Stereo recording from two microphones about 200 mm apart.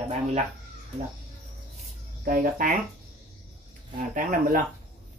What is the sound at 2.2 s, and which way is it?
Speech, 45° right (ahead or behind).